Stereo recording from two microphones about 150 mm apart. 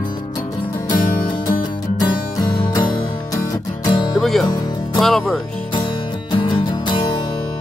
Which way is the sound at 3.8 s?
30° left (ahead or behind).